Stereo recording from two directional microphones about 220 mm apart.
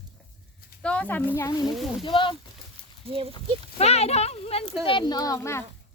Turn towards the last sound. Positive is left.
turn(degrees=10)  # may be behind; listen again after turning